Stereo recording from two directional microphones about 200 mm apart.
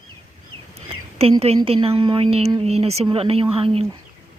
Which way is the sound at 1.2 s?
30° right (ahead or behind).